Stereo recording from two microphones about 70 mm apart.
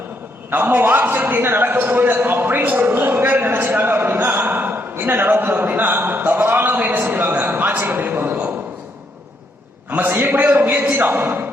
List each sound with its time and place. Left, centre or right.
0.5 s a man's voice: right
9.9 s a man's voice: right